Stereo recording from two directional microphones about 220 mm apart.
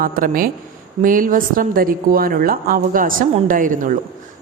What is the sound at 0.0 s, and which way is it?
A woman's voice, 40° right (ahead or behind).